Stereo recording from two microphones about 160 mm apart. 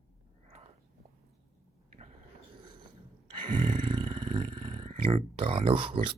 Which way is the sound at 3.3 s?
30° right (ahead or behind).